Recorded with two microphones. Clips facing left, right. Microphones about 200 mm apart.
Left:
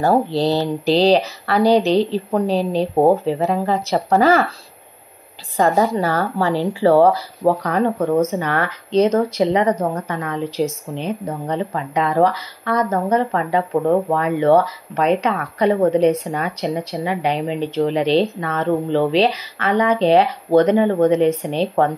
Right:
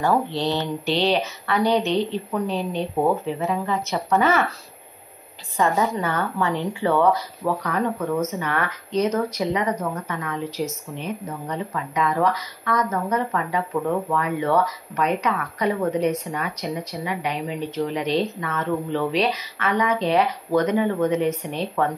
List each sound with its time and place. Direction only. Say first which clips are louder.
0.0 s speech: left 5 dB; 35° left (ahead or behind)
5.6 s speech: left 5 dB; 35° left (ahead or behind)